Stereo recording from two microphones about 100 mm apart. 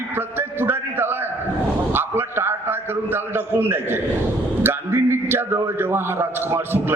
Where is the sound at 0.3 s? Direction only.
20° right (ahead or behind).